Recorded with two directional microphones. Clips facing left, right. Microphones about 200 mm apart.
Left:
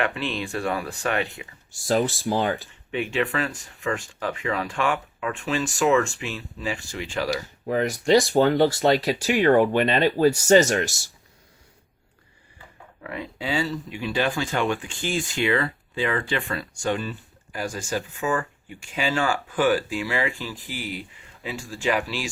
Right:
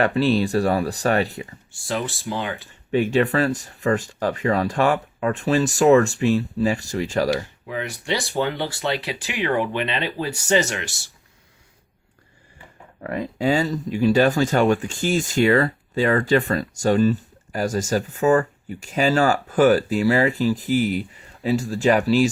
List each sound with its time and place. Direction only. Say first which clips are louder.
0.0 s speech: right 8 dB; 40° right (ahead or behind)
1.7 s speech: left 5 dB; 40° left (ahead or behind)
2.9 s speech: right 6 dB; 40° right (ahead or behind)
7.7 s speech: left 7 dB; 40° left (ahead or behind)
13.0 s speech: right 8 dB; 45° right (ahead or behind)